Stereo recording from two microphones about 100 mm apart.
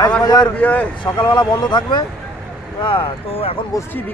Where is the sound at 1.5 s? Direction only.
50° left (ahead or behind); by 3.5 s 65° left (ahead or behind).